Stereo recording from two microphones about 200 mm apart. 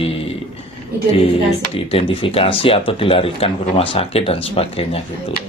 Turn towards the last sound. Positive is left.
turn(degrees=30)  # may be behind; listen again after turning